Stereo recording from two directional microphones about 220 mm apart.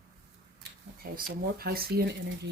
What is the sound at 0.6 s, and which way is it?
Speech, 40° right (ahead or behind).